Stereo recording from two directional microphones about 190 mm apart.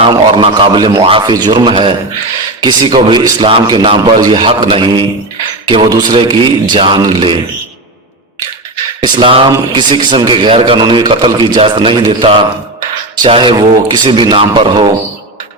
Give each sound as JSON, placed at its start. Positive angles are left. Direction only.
{"t": 0.0, "sound": "a man's voice", "side_deg": -25}
{"t": 9.0, "sound": "a man's voice", "side_deg": -25}